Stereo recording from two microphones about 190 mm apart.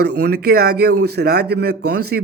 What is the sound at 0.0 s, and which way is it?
A man's voice, 55° right (ahead or behind).